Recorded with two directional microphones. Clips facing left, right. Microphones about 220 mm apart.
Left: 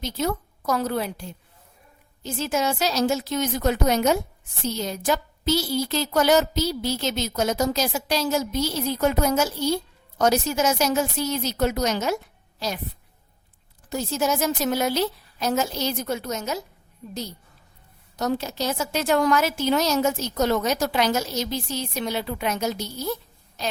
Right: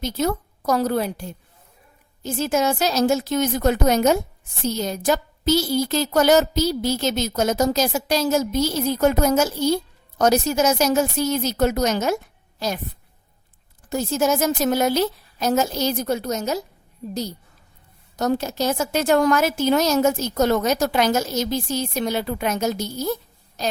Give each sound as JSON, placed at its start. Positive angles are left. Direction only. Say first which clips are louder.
{"t": 0.0, "sound": "a woman's voice", "louder": "right 3 dB", "side_deg": -45}
{"t": 13.9, "sound": "a woman's voice", "louder": "right 4 dB", "side_deg": -50}
{"t": 18.2, "sound": "a woman's voice", "louder": "right 4 dB", "side_deg": -50}